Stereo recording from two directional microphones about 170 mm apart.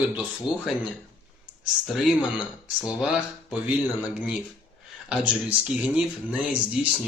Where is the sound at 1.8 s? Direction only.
Centre (ahead or behind).